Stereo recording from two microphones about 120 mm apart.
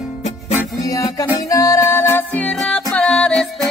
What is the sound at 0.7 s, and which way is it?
Music, 30° left (ahead or behind).